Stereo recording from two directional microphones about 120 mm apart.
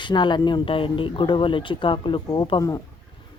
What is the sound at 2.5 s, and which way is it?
Speech, 30° left (ahead or behind).